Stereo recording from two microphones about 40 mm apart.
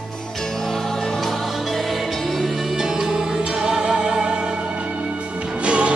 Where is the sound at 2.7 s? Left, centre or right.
Centre.